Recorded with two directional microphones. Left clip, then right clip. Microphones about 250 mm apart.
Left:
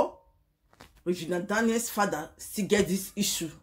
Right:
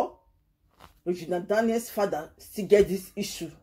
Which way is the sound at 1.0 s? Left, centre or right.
Centre.